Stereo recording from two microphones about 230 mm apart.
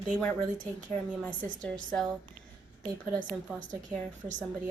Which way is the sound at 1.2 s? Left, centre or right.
Centre.